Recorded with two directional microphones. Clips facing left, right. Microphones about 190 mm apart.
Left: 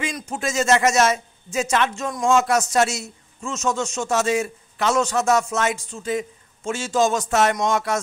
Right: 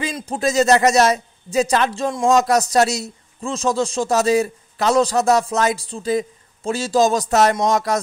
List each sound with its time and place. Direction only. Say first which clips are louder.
0.0 s speech: right 5 dB; 35° right (ahead or behind)